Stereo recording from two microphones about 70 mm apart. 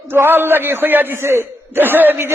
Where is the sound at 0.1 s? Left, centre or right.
Right.